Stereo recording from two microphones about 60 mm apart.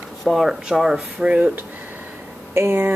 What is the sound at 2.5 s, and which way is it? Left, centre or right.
Speech, right.